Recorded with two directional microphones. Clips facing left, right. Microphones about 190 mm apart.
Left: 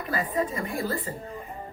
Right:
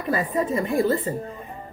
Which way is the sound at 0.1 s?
25° right (ahead or behind).